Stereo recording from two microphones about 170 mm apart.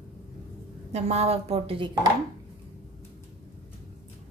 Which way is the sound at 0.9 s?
40° right (ahead or behind).